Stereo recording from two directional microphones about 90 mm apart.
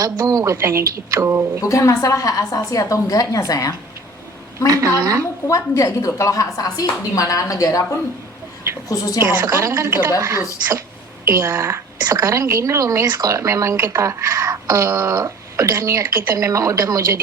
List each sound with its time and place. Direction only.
0.0 s a woman's voice: 40° right (ahead or behind)
1.6 s a woman's voice: 35° left (ahead or behind)
4.7 s a woman's voice: 40° right (ahead or behind)
5.5 s a woman's voice: 35° left (ahead or behind)
8.9 s a woman's voice: 40° left (ahead or behind)
9.5 s a woman's voice: 35° right (ahead or behind)